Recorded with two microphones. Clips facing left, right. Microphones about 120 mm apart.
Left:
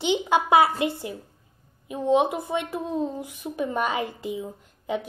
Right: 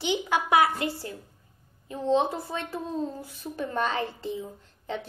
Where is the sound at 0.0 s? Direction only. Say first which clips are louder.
Left 4 dB; 20° left (ahead or behind).